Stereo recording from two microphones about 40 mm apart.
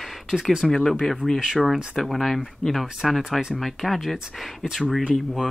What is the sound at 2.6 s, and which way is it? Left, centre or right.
Speech, centre.